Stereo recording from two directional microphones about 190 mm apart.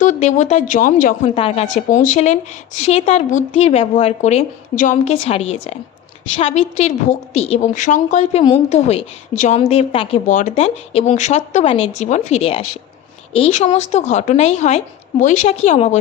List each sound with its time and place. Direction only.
0.0 s a woman's voice: 40° left (ahead or behind)
1.4 s a woman's voice: 30° left (ahead or behind)
10.2 s a woman's voice: 40° left (ahead or behind)